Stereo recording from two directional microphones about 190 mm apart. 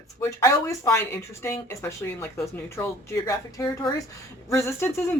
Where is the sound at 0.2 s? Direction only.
15° left (ahead or behind).